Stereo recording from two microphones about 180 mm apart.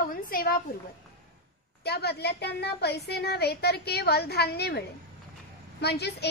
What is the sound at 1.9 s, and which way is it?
A woman's voice, 65° left (ahead or behind).